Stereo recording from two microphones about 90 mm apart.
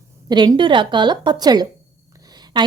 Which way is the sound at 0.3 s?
55° right (ahead or behind).